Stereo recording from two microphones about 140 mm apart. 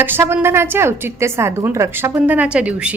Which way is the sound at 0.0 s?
15° right (ahead or behind).